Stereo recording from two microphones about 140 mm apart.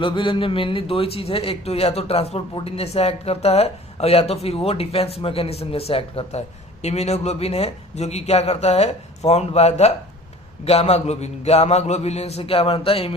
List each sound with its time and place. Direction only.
0.0 s a man's voice: 35° left (ahead or behind)